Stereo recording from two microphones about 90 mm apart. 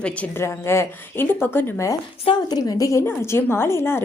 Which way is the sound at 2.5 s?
45° left (ahead or behind).